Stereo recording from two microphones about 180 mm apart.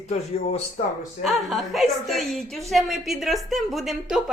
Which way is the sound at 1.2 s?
Centre (ahead or behind).